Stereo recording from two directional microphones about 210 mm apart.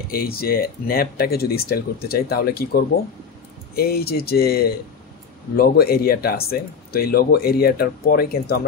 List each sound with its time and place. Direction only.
0.1 s speech: 45° left (ahead or behind)